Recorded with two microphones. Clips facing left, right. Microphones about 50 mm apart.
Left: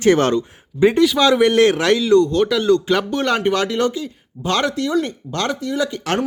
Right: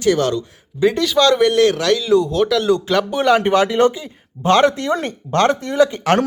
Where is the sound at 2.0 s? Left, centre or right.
Centre.